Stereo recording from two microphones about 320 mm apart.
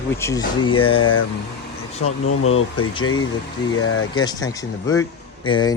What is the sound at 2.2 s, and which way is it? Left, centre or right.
Speech, left.